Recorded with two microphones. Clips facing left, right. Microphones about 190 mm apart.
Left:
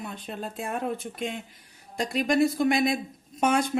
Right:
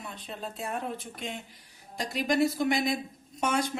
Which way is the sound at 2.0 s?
55° left (ahead or behind).